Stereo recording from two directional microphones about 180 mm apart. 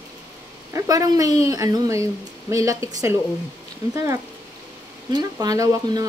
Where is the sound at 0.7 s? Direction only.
20° right (ahead or behind).